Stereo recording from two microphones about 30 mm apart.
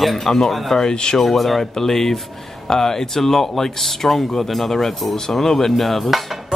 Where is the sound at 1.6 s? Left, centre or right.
Centre.